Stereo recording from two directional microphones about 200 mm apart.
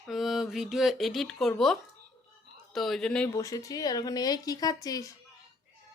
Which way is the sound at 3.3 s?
15° left (ahead or behind).